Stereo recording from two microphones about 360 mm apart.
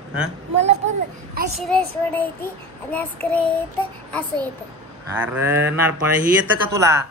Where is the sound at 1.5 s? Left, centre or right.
Centre.